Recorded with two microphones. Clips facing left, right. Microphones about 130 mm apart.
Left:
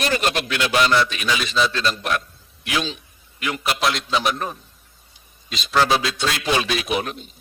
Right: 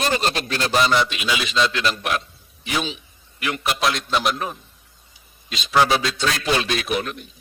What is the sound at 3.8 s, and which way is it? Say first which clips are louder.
A man's voice: even; centre (ahead or behind).